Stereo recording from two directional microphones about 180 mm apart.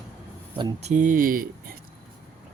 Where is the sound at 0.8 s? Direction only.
45° right (ahead or behind).